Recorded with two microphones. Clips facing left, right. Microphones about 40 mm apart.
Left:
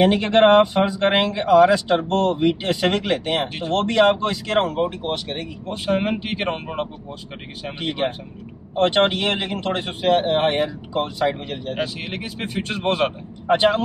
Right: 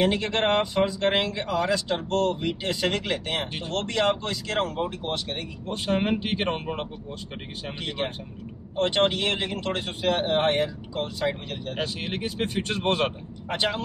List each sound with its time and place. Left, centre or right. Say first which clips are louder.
0.0 s speech: left 8 dB; left
3.9 s speech: left 7 dB; left
5.7 s speech: left 3 dB; centre
8.0 s speech: left 6 dB; left
11.2 s speech: left 5 dB; centre
13.5 s speech: left 10 dB; left